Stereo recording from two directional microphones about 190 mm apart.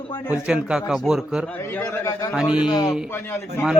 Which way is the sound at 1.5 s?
10° left (ahead or behind).